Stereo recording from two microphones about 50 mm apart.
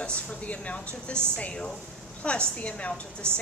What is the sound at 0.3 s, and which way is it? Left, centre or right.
A woman's voice, left.